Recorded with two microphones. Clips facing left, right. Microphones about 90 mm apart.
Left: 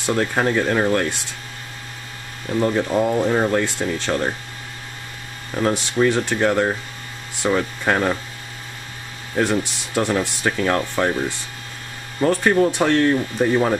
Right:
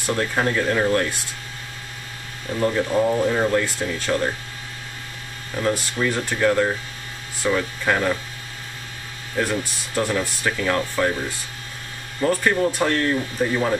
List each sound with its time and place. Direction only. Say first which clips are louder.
0.0 s speech: left 2 dB; 25° left (ahead or behind)
2.6 s speech: even; 15° left (ahead or behind)
5.6 s speech: left 4 dB; 25° left (ahead or behind)
9.4 s speech: left 4 dB; 25° left (ahead or behind)
12.2 s speech: left 3 dB; 25° left (ahead or behind)